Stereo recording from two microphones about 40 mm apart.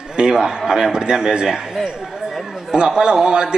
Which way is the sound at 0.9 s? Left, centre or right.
Centre.